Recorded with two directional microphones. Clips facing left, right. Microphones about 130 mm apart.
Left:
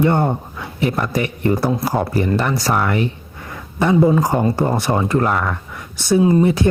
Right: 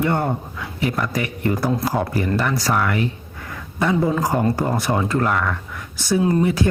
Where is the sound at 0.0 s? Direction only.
25° left (ahead or behind).